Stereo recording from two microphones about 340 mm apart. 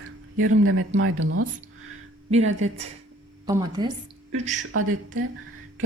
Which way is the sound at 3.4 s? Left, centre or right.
Centre.